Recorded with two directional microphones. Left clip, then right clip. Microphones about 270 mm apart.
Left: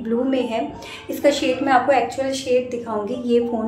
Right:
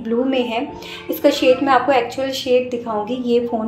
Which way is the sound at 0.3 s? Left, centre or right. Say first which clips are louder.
Right 2 dB; centre.